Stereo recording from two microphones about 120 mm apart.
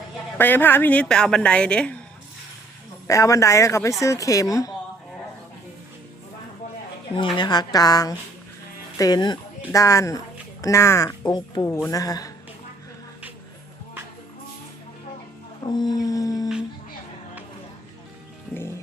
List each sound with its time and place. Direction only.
0.3 s a woman's voice: 15° left (ahead or behind)
3.1 s speech: 25° left (ahead or behind)
7.1 s speech: 40° left (ahead or behind)
15.6 s speech: 35° left (ahead or behind)